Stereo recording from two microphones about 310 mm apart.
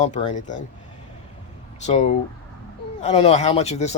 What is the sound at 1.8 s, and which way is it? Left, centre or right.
Speech, left.